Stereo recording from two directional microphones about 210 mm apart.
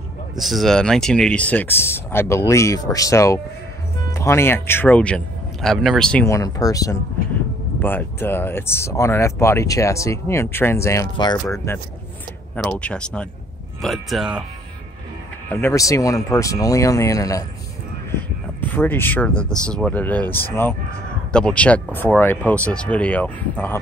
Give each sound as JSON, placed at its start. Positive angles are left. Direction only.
{"t": 0.4, "sound": "speech", "side_deg": 0}
{"t": 12.5, "sound": "speech", "side_deg": 5}
{"t": 15.5, "sound": "speech", "side_deg": 10}
{"t": 18.7, "sound": "speech", "side_deg": 10}
{"t": 19.3, "sound": "speech", "side_deg": -15}
{"t": 19.7, "sound": "speech", "side_deg": 5}